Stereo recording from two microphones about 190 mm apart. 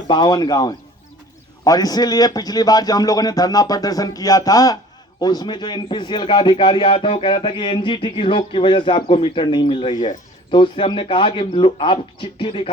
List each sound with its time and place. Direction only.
0.1 s a man's voice: 25° left (ahead or behind)